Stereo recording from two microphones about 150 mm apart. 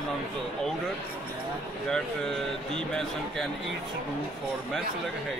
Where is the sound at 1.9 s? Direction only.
5° left (ahead or behind).